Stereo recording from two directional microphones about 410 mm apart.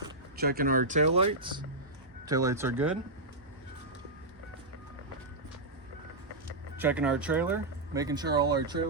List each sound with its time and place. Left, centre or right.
0.3 s speech: right; by 3.0 s centre
6.7 s speech: centre